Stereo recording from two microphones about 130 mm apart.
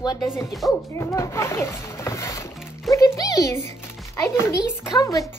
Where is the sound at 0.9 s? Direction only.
25° left (ahead or behind).